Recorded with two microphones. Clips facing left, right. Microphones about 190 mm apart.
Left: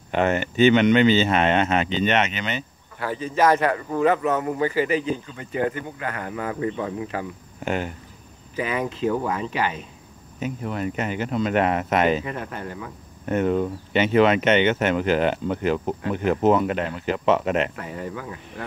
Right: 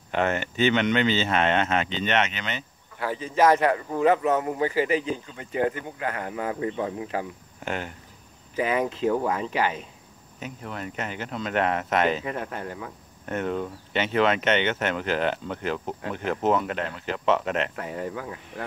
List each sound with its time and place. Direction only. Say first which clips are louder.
0.1 s speech: left 4 dB; 15° left (ahead or behind)
3.0 s a man's voice: left 1 dB; 15° right (ahead or behind)
7.6 s speech: left 5 dB; 10° left (ahead or behind)
8.5 s speech: right 1 dB; 40° right (ahead or behind)
10.4 s speech: left 8 dB; 10° left (ahead or behind)
12.3 s speech: even; 30° right (ahead or behind)
13.2 s speech: left 6 dB; 10° left (ahead or behind)